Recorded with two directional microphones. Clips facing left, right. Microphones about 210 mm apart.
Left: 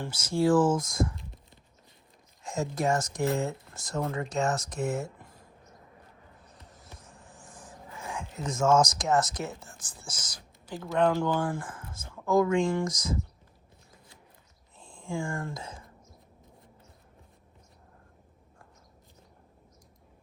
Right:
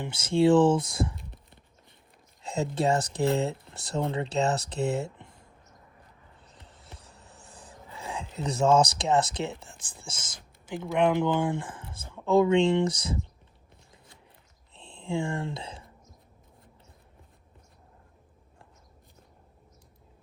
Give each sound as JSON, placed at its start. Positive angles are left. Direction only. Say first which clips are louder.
{"t": 0.0, "sound": "speech", "louder": "right 4 dB", "side_deg": -25}
{"t": 2.6, "sound": "speech", "louder": "right 2 dB", "side_deg": -30}
{"t": 8.4, "sound": "speech", "louder": "right 1 dB", "side_deg": -35}
{"t": 15.1, "sound": "speech", "louder": "right 3 dB", "side_deg": -25}